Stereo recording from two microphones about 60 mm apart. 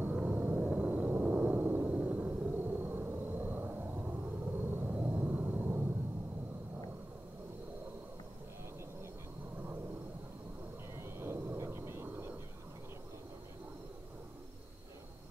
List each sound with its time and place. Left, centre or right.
0.1 s gong: right
11.0 s fixed-wing aircraft: right